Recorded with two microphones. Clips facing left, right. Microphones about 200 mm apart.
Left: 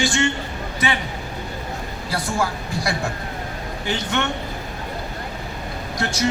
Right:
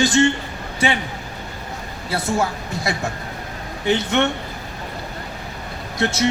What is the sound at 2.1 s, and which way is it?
Speech, 25° right (ahead or behind).